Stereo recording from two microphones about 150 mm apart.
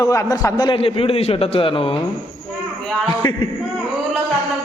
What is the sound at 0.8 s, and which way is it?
A man's voice, 40° left (ahead or behind).